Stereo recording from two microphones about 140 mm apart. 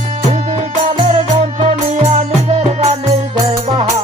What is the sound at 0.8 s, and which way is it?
Music, 40° right (ahead or behind).